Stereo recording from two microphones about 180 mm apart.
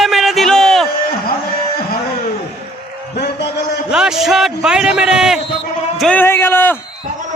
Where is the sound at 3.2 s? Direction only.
65° left (ahead or behind).